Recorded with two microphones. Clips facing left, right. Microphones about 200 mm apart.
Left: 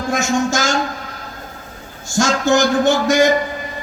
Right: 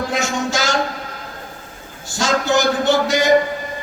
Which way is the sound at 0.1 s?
45° left (ahead or behind).